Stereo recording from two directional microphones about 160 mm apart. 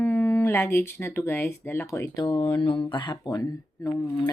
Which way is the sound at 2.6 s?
35° left (ahead or behind).